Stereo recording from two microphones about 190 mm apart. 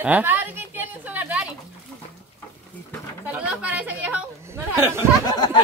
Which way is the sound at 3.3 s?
5° right (ahead or behind).